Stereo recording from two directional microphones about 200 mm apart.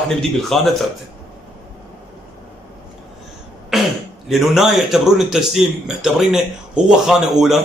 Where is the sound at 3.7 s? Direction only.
Centre (ahead or behind).